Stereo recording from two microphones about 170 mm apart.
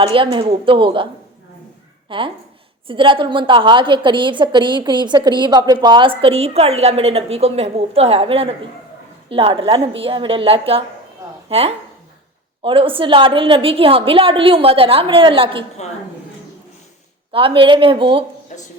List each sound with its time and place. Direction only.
0.0 s a woman's voice: 30° right (ahead or behind)
2.0 s a woman's voice: 30° right (ahead or behind)
17.3 s a woman's voice: 30° right (ahead or behind)
18.5 s a sound: 50° left (ahead or behind)